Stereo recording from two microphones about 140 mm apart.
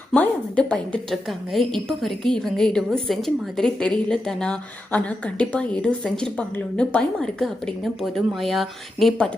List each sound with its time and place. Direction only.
0.1 s a woman's voice: 10° left (ahead or behind)